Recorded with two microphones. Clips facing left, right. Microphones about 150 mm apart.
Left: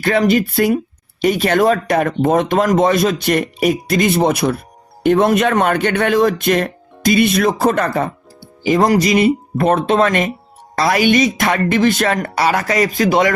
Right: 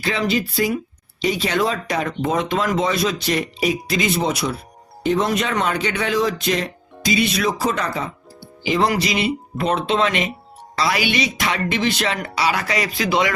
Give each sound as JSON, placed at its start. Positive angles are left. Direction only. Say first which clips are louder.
{"t": 0.0, "sound": "speech", "louder": "left 7 dB", "side_deg": 55}
{"t": 8.6, "sound": "speech", "louder": "left 6 dB", "side_deg": 45}